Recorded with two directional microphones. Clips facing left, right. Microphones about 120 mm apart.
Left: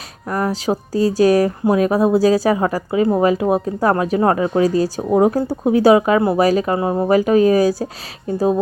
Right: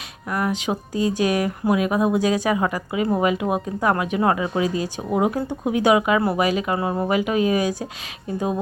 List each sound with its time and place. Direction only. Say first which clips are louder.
0.3 s speech: left 4 dB; 35° left (ahead or behind)